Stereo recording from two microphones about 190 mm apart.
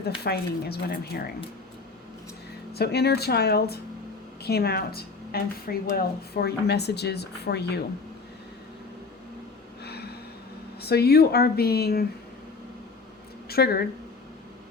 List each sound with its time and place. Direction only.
0.3 s speech: 55° left (ahead or behind)
2.7 s speech: 55° left (ahead or behind)
9.8 s a sound: 60° left (ahead or behind)
10.8 s speech: 55° left (ahead or behind)
13.5 s a woman's voice: 55° left (ahead or behind)